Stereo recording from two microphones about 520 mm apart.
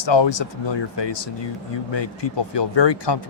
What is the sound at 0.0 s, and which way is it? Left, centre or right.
Speech, left.